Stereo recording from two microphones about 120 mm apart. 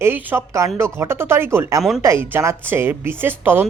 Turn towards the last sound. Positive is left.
turn(degrees=-20)  # may be behind; listen again after turning